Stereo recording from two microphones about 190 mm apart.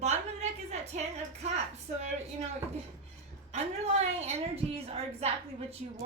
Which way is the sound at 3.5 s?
35° right (ahead or behind).